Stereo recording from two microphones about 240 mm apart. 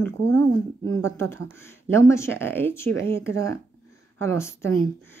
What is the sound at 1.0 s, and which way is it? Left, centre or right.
Speech, centre.